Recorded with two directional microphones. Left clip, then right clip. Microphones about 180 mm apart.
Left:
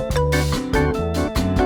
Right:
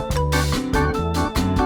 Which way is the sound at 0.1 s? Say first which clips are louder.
Even; centre (ahead or behind).